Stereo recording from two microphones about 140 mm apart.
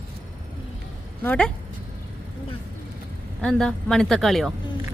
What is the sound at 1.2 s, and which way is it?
Speech, 10° left (ahead or behind).